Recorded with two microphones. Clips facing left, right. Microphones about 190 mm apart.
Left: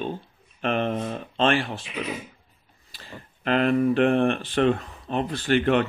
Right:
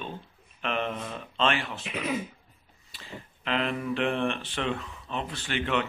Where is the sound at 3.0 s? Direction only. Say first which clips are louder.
Left 7 dB; 50° left (ahead or behind).